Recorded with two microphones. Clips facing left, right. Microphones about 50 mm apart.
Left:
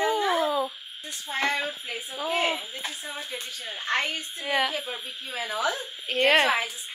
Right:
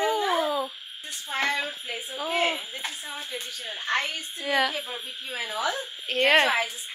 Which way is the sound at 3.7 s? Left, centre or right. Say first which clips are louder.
Even; left.